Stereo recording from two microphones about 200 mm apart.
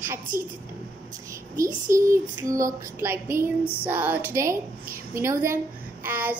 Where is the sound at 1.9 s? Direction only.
15° right (ahead or behind).